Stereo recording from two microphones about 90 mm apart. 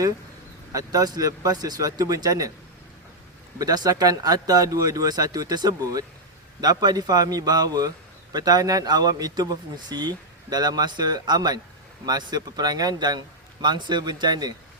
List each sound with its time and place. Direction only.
0.7 s a man's voice: 40° right (ahead or behind)
3.6 s a man's voice: 45° right (ahead or behind)